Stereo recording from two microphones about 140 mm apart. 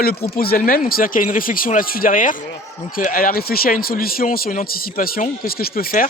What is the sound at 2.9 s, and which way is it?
A man's voice, 85° left.